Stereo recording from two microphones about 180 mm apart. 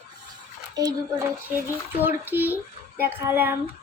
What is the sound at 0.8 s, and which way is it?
A child's voice, 20° right (ahead or behind).